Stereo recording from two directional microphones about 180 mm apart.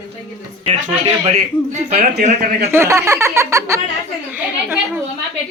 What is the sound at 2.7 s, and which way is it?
A woman's voice, 15° right (ahead or behind).